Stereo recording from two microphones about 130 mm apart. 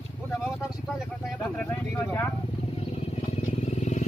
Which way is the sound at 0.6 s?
5° right (ahead or behind).